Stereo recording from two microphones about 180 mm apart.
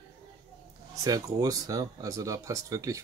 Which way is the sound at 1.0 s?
20° right (ahead or behind).